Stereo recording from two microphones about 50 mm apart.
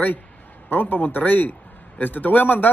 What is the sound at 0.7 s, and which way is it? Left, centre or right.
A man's voice, left.